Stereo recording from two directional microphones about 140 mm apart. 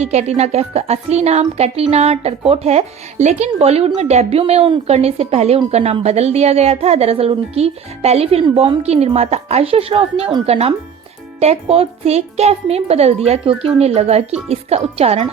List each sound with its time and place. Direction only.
0.0 s speech: 50° right (ahead or behind)